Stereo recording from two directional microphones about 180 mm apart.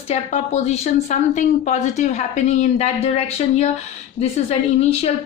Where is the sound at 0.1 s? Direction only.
35° left (ahead or behind).